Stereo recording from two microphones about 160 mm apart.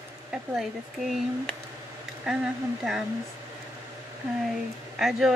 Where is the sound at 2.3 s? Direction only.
Centre (ahead or behind).